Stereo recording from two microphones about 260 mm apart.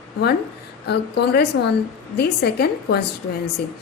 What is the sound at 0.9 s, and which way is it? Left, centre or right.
A woman's voice, left.